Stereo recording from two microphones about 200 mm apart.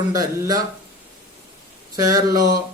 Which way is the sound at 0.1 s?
20° right (ahead or behind).